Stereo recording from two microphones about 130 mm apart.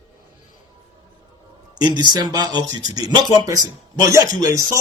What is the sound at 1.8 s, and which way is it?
Speech, 30° right (ahead or behind).